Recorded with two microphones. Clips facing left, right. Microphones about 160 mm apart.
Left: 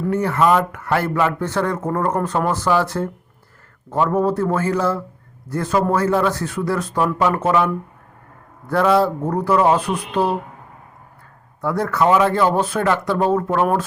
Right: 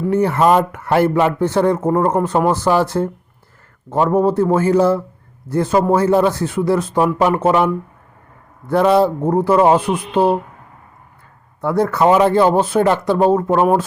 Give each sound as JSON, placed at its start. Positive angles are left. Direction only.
{"t": 0.1, "sound": "speech", "side_deg": -25}
{"t": 11.6, "sound": "speech", "side_deg": -25}